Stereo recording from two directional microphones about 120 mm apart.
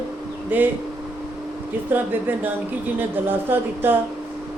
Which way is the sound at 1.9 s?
15° right (ahead or behind).